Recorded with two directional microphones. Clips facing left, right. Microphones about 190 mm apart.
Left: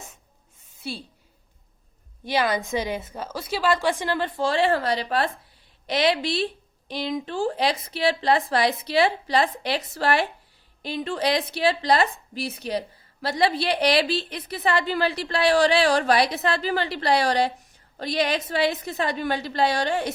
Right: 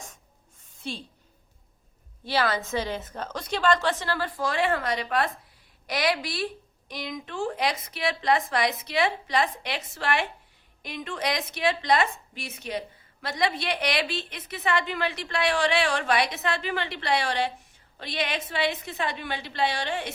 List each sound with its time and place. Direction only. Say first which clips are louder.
0.8 s a woman's voice: left 2 dB; 10° left (ahead or behind)
2.2 s a woman's voice: left 2 dB; 15° left (ahead or behind); by 20.1 s 40° left (ahead or behind)